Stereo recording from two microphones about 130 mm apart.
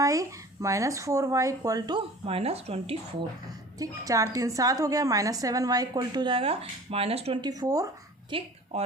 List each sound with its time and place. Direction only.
0.0 s a woman's voice: 25° right (ahead or behind); by 3.0 s 50° right (ahead or behind)
3.8 s a woman's voice: 25° right (ahead or behind); by 7.3 s 50° right (ahead or behind)
7.4 s a woman's voice: 30° right (ahead or behind)
8.3 s a woman's voice: 45° right (ahead or behind)